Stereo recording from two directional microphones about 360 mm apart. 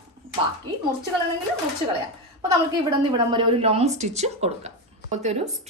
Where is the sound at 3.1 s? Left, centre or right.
Centre.